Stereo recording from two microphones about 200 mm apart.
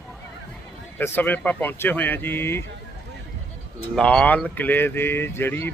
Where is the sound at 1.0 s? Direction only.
10° left (ahead or behind).